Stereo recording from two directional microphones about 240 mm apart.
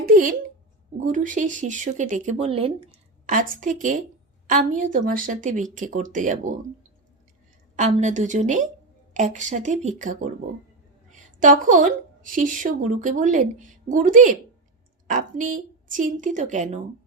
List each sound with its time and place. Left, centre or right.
0.0 s a sound: right
1.0 s speech: right
7.8 s a woman's voice: right